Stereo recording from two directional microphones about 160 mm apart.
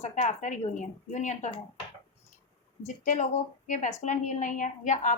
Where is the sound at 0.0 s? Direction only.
50° left (ahead or behind).